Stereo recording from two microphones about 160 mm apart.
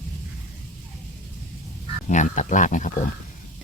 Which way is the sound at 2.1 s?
50° left (ahead or behind).